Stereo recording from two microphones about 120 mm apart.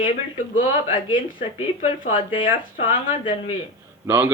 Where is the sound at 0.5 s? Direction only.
90° left.